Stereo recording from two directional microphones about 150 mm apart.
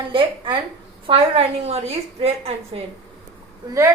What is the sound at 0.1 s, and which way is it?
A woman's voice, 35° right (ahead or behind).